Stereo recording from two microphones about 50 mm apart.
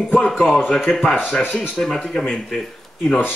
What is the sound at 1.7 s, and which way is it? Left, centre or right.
Speech, centre.